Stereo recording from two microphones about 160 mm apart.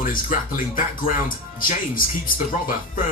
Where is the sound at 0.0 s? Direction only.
55° left (ahead or behind).